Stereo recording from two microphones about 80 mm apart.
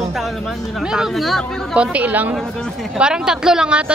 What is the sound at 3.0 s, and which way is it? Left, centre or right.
Speech, centre.